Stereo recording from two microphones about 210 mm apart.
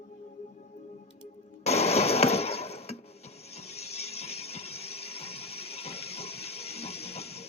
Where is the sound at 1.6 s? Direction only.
30° left (ahead or behind).